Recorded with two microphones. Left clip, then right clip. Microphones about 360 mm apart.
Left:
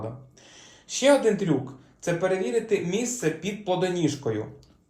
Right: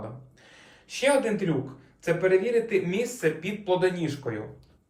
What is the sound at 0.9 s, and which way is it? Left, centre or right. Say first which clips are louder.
Speech: left 3 dB; centre.